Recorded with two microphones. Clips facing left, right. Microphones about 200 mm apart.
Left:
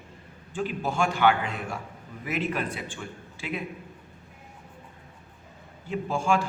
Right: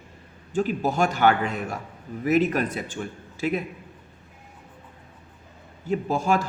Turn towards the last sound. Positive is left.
turn(degrees=-40)  # may be behind; listen again after turning